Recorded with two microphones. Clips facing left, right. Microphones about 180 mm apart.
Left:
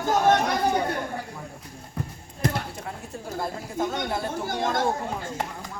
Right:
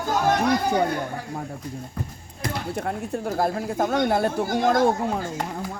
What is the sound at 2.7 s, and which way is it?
Speech, 60° right (ahead or behind).